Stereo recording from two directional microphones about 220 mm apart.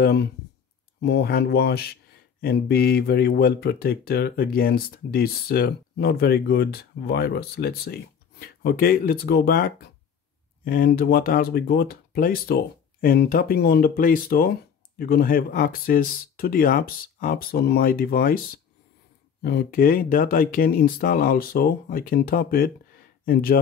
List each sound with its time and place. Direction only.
0.0 s speech: 50° left (ahead or behind)